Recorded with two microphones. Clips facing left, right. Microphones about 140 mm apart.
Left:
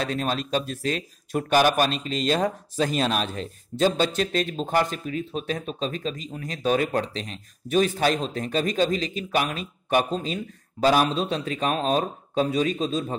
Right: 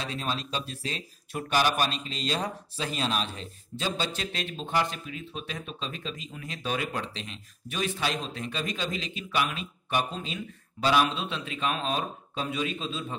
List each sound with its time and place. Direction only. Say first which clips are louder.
0.0 s speech: left 6 dB; 55° left (ahead or behind); by 13.0 s 40° left (ahead or behind)